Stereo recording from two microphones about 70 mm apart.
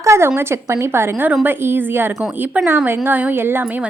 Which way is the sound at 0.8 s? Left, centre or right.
Right.